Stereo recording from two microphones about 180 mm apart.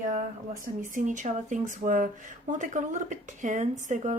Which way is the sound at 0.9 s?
45° right (ahead or behind).